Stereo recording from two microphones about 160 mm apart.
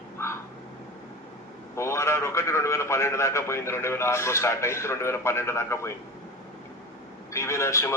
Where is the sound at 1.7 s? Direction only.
15° left (ahead or behind).